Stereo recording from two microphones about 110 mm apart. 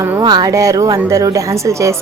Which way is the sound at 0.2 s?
40° right (ahead or behind).